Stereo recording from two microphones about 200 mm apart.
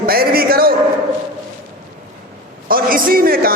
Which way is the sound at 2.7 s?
45° right (ahead or behind).